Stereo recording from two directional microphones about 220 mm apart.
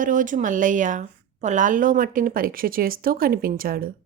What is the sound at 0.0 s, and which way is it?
A woman's voice, 35° right (ahead or behind).